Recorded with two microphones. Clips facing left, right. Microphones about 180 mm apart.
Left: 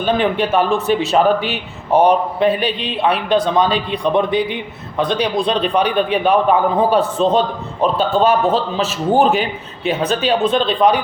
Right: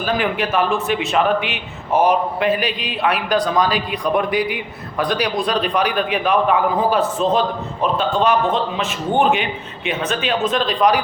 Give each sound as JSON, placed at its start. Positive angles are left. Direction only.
{"t": 0.0, "sound": "a man's voice", "side_deg": 30}